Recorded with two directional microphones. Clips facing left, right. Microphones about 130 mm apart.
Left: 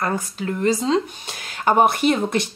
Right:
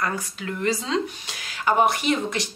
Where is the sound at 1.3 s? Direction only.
45° left (ahead or behind).